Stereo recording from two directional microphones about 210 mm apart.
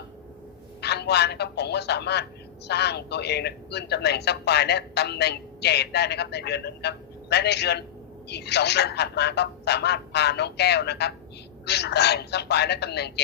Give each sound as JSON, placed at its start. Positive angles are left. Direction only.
{"t": 0.8, "sound": "speech", "side_deg": 50}